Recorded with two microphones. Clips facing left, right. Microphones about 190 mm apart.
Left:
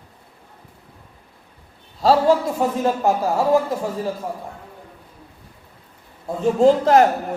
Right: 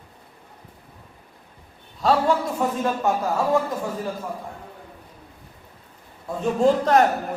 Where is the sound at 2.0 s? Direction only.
30° left (ahead or behind).